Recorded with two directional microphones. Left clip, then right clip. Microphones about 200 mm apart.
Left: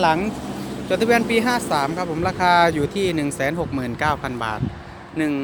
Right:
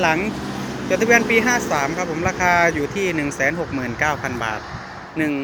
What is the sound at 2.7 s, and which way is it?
Speech, 25° left (ahead or behind).